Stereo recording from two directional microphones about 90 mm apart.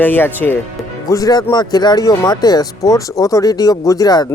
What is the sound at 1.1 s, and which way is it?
Speech, 40° left (ahead or behind).